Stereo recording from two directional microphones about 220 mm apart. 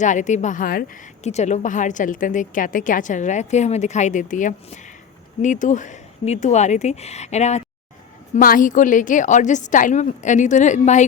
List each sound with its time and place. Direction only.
0.0 s a woman's voice: 35° left (ahead or behind)